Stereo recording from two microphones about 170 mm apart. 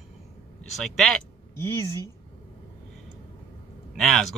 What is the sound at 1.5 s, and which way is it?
Speech, 15° left (ahead or behind).